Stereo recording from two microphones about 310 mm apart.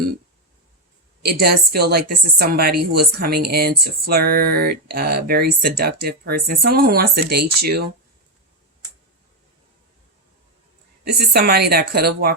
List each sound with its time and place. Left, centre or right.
1.2 s speech: right
11.0 s speech: right